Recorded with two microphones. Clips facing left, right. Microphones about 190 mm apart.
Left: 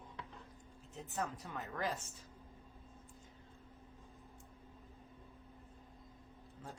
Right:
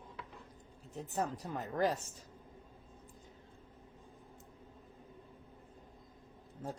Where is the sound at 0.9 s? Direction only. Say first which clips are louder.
Right 5 dB; 40° right (ahead or behind).